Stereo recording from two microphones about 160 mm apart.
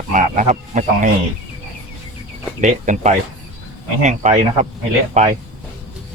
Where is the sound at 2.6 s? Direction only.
50° right (ahead or behind).